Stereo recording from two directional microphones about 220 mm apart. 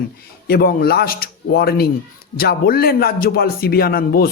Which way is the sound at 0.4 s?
45° left (ahead or behind).